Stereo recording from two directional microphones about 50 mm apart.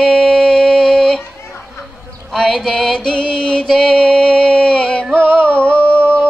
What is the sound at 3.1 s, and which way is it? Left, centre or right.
Music, centre.